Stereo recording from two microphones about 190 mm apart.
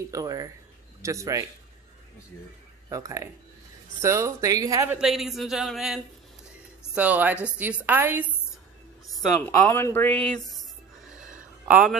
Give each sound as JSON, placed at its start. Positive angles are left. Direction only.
{"t": 0.1, "sound": "speech", "side_deg": -20}
{"t": 2.9, "sound": "speech", "side_deg": -15}
{"t": 4.9, "sound": "speech", "side_deg": 0}
{"t": 7.0, "sound": "speech", "side_deg": -10}
{"t": 9.2, "sound": "speech", "side_deg": 10}
{"t": 11.6, "sound": "speech", "side_deg": -5}